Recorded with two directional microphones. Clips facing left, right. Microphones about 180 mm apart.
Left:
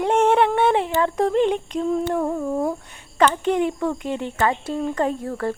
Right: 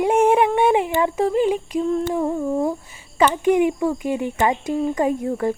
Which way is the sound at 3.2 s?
10° right (ahead or behind).